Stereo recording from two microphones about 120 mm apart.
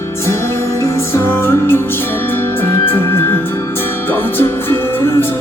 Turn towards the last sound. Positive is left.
turn(degrees=20)  # may be behind; listen again after turning